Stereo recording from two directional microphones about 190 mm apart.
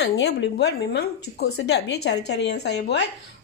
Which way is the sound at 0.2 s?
60° left (ahead or behind).